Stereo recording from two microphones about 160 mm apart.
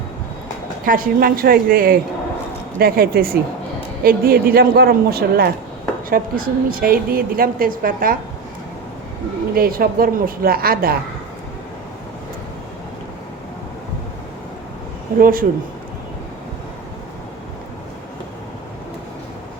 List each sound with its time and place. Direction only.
0.9 s a woman's voice: 60° right (ahead or behind)
6.1 s a woman's voice: 65° right (ahead or behind)
9.6 s speech: 65° right (ahead or behind)
15.2 s a woman's voice: 60° right (ahead or behind)